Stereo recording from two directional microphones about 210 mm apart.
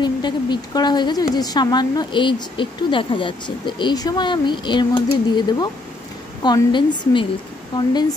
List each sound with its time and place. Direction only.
0.0 s speech: 20° left (ahead or behind)